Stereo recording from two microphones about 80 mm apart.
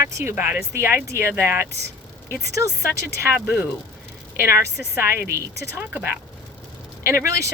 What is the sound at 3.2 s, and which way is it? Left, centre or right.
Speech, right.